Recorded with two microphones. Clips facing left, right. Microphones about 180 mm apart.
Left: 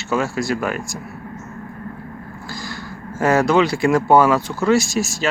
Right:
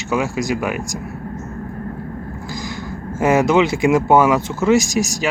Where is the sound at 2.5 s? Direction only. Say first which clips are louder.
Right 3 dB; 20° right (ahead or behind).